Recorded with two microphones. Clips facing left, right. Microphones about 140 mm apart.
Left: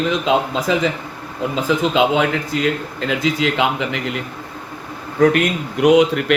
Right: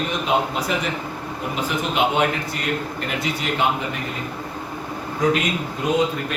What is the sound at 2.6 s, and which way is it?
A man's voice, 90° left.